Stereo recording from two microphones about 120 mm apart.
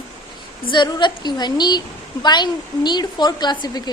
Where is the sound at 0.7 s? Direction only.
40° left (ahead or behind).